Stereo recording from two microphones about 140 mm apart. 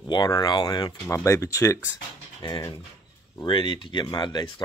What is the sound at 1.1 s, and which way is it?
Speech, 20° left (ahead or behind).